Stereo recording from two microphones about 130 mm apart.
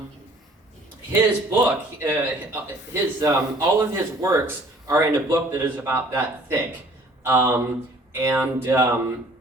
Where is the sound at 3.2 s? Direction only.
20° right (ahead or behind).